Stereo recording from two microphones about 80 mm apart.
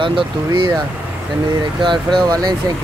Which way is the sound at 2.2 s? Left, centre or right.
Right.